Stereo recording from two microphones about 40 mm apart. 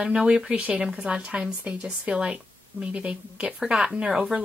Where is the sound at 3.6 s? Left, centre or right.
Right.